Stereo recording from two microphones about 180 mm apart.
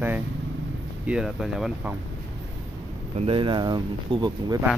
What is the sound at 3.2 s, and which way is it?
Speech, 30° right (ahead or behind).